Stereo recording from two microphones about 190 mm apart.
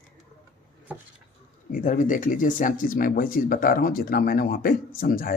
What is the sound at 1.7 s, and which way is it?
Speech, 45° left (ahead or behind).